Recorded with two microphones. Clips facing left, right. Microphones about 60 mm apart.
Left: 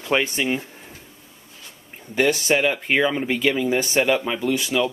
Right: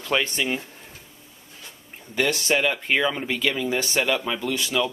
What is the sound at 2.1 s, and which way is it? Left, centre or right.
Speech, centre.